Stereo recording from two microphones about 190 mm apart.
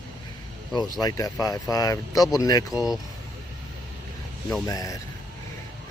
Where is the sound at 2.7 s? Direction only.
Centre (ahead or behind).